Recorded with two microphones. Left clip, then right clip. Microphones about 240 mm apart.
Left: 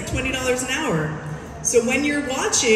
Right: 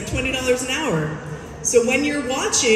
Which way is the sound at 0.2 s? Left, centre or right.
Centre.